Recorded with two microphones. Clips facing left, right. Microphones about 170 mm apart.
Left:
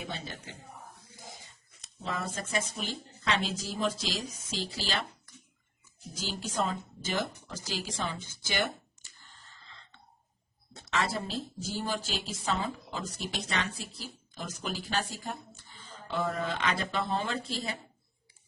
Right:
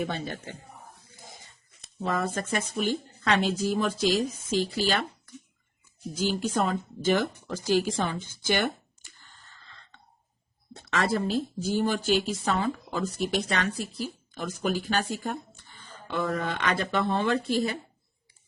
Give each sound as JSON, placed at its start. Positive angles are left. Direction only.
{"t": 0.0, "sound": "a man's voice", "side_deg": -55}
{"t": 2.0, "sound": "a woman's voice", "side_deg": -70}
{"t": 6.2, "sound": "a woman's voice", "side_deg": -55}
{"t": 10.8, "sound": "a woman's voice", "side_deg": -55}